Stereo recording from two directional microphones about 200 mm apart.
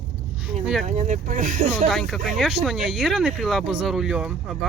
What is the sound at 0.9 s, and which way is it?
Speech, 35° right (ahead or behind).